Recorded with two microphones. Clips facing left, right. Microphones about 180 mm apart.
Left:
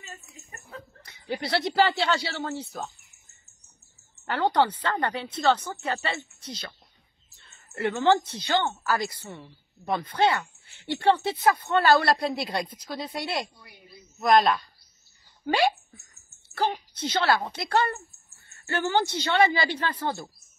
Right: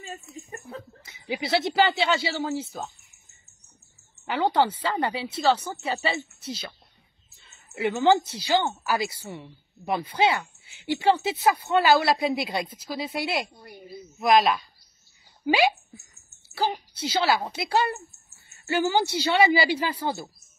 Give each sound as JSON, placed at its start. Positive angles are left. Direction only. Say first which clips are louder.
{"t": 1.0, "sound": "a woman's voice", "louder": "even", "side_deg": -5}
{"t": 7.3, "sound": "a sound", "louder": "right 1 dB", "side_deg": 0}
{"t": 7.9, "sound": "a woman's voice", "louder": "right 2 dB", "side_deg": -10}
{"t": 13.6, "sound": "speech", "louder": "right 9 dB", "side_deg": -45}
{"t": 14.1, "sound": "a woman's voice", "louder": "even", "side_deg": 0}